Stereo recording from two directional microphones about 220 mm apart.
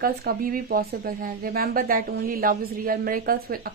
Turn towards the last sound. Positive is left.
turn(degrees=-40)  # may be behind; listen again after turning